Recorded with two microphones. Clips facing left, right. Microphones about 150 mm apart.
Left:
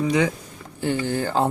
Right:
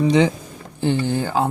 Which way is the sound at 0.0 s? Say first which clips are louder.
Right 5 dB; 25° right (ahead or behind).